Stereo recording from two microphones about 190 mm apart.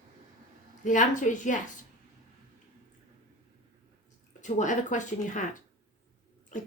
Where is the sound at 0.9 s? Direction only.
40° left (ahead or behind).